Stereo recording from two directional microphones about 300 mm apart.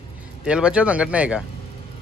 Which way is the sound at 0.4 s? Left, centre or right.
Centre.